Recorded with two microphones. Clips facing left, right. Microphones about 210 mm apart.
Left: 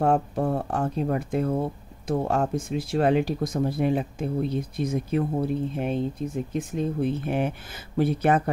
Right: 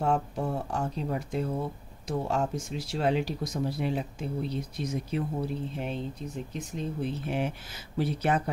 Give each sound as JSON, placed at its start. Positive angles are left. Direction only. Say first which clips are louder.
{"t": 0.0, "sound": "speech", "louder": "left 5 dB", "side_deg": 55}